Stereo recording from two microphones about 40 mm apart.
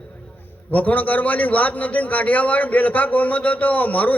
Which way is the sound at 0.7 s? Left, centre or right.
Left.